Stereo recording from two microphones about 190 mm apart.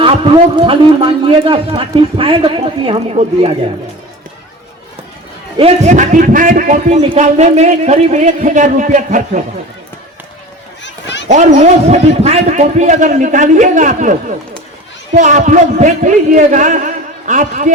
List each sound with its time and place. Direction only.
0.0 s a man's voice: 30° right (ahead or behind)
5.5 s a man's voice: 35° right (ahead or behind)
10.8 s run: 70° left (ahead or behind)
11.3 s a man's voice: 40° right (ahead or behind)